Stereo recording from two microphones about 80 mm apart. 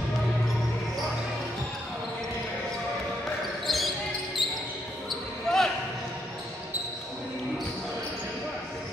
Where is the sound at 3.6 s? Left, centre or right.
Centre.